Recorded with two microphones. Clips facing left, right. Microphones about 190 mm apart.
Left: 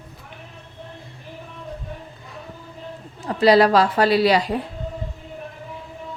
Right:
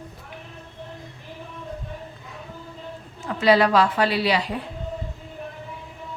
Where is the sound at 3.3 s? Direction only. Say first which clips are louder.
Left 3 dB; 35° left (ahead or behind).